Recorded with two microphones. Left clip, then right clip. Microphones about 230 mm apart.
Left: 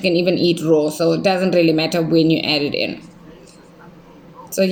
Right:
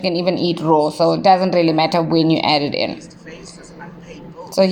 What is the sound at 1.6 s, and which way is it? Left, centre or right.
Speech, centre.